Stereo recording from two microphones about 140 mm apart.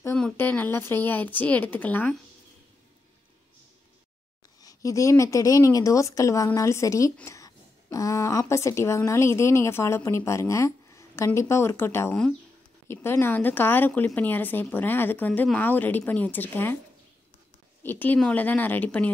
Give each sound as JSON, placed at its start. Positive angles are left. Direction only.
{"t": 0.2, "sound": "speech", "side_deg": 10}
{"t": 4.6, "sound": "speech", "side_deg": 25}
{"t": 17.8, "sound": "speech", "side_deg": 15}